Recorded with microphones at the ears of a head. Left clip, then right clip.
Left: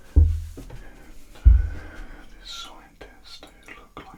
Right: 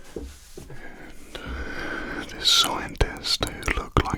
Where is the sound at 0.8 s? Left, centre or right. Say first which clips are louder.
Right 7 dB; right.